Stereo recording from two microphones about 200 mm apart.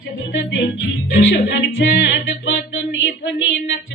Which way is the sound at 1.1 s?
60° left (ahead or behind).